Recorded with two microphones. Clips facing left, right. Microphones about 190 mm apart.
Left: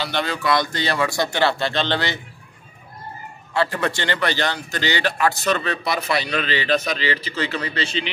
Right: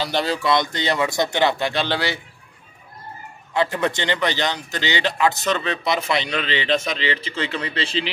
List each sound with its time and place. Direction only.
0.0 s a man's voice: 35° right (ahead or behind); by 2.1 s 10° right (ahead or behind)
3.5 s a man's voice: 20° right (ahead or behind)